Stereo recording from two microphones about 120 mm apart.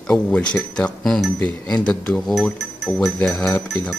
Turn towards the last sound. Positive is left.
turn(degrees=10)  # may be behind; listen again after turning